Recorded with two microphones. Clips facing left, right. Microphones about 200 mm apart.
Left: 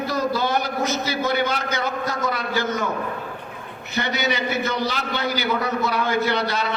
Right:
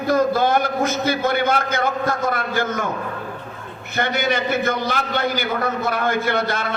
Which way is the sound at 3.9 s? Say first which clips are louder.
Right 3 dB; 50° right (ahead or behind).